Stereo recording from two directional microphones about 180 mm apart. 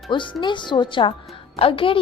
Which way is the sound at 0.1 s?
25° left (ahead or behind).